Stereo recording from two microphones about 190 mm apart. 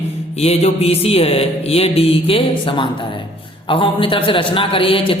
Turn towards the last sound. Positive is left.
turn(degrees=25)  # may be behind; listen again after turning